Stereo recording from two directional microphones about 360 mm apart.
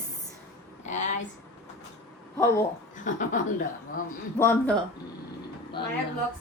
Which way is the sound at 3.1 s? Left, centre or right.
Left.